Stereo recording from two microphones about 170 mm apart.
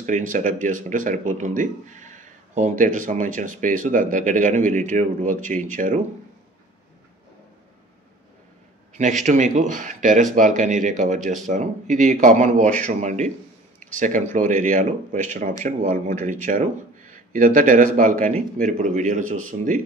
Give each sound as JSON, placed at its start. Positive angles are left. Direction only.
{"t": 0.0, "sound": "speech", "side_deg": -50}
{"t": 9.2, "sound": "speech", "side_deg": -45}